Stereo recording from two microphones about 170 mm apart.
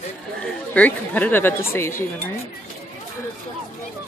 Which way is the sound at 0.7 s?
10° left (ahead or behind).